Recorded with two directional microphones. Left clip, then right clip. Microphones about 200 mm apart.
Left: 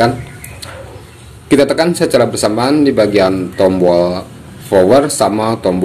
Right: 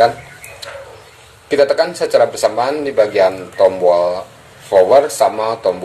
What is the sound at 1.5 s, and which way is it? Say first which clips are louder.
A man's voice: left 2 dB; 15° left (ahead or behind).